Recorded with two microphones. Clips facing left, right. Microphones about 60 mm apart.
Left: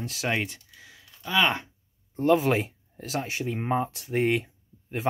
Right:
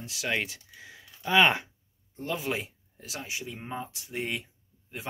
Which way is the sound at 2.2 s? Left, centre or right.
Left.